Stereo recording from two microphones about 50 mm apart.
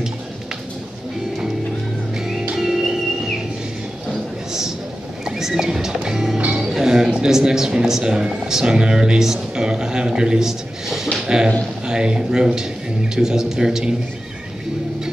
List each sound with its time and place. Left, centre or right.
2.1 s music: centre
4.5 s a sound: centre
5.2 s music: centre
6.5 s a man's voice: centre